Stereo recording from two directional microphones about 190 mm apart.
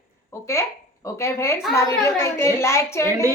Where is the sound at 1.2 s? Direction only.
15° left (ahead or behind).